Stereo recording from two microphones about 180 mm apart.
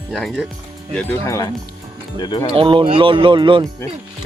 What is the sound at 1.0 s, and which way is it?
Speech, 10° left (ahead or behind).